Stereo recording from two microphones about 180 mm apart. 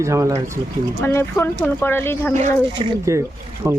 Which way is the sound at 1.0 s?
15° left (ahead or behind).